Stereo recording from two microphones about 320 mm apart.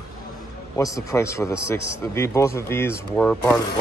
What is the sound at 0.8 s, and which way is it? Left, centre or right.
A man's voice, centre.